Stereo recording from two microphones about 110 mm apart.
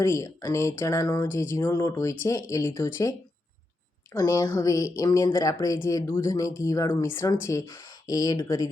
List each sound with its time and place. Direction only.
0.0 s a woman's voice: 30° left (ahead or behind)